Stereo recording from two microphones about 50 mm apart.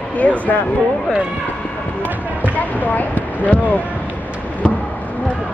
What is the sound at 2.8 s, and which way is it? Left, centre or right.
Speech, left.